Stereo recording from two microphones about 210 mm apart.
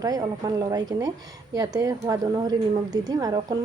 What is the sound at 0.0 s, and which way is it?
A woman's voice, 15° right (ahead or behind).